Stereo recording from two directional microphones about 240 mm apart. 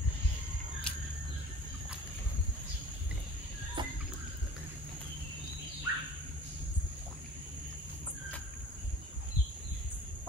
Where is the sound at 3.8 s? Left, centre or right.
Centre.